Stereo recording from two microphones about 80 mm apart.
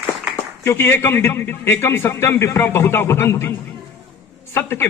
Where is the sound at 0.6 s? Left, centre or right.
Left.